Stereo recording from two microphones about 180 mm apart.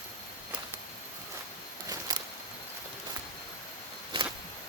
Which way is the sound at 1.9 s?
20° right (ahead or behind).